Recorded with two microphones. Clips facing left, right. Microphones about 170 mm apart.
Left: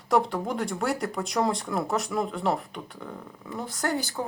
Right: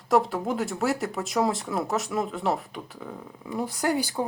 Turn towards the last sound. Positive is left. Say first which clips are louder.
# right 3 dB
turn(degrees=-10)  # may be behind; listen again after turning